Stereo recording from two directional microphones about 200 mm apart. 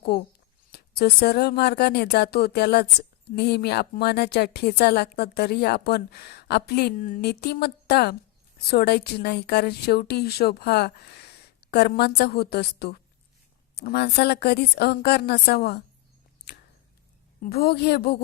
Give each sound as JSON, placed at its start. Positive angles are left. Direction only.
{"t": 0.7, "sound": "a woman's voice", "side_deg": 50}
{"t": 17.4, "sound": "a woman's voice", "side_deg": 50}